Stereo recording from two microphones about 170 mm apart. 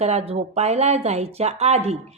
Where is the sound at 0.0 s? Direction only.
40° right (ahead or behind).